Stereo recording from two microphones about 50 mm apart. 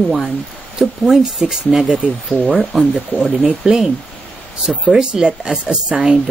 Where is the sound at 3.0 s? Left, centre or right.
Right.